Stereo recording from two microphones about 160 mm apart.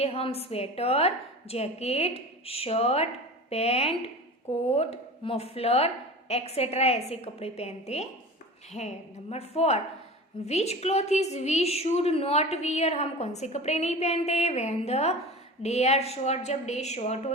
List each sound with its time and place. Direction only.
0.0 s a woman's voice: 40° left (ahead or behind)